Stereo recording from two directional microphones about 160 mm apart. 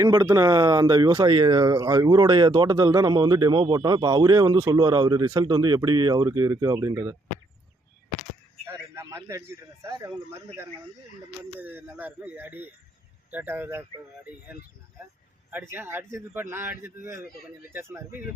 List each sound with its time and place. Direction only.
0.0 s speech: 20° right (ahead or behind)
8.6 s a man's voice: 20° right (ahead or behind)
15.4 s speech: 15° right (ahead or behind)